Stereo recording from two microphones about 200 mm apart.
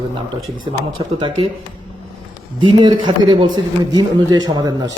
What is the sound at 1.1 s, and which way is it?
Speech, 25° right (ahead or behind).